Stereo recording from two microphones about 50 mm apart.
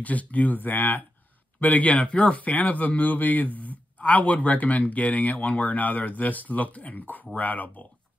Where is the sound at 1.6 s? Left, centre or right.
Left.